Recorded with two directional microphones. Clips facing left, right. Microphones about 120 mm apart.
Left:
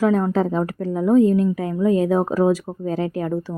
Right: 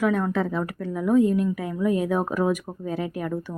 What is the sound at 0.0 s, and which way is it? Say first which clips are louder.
A woman's voice: left 5 dB; 35° left (ahead or behind).